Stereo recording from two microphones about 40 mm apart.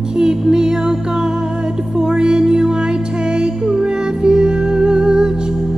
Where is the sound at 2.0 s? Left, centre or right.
Right.